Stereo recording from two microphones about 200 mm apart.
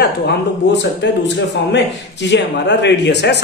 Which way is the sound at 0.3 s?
60° left (ahead or behind).